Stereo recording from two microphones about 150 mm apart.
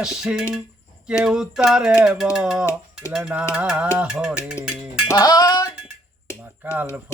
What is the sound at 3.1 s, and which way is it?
Music, 5° right (ahead or behind).